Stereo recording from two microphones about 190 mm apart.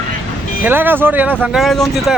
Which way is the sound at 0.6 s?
10° right (ahead or behind).